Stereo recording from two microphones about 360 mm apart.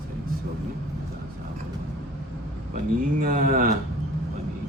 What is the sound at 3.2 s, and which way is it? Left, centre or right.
Speech, right.